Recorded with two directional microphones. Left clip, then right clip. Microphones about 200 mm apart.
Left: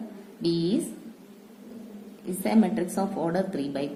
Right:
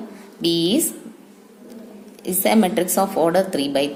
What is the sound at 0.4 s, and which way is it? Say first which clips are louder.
Speech: right 7 dB; 35° right (ahead or behind).